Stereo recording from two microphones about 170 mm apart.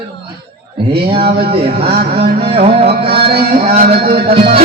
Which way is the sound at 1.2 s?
65° right (ahead or behind).